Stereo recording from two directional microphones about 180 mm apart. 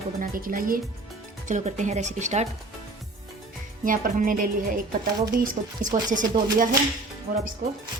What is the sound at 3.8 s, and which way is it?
A woman's voice, 50° right (ahead or behind).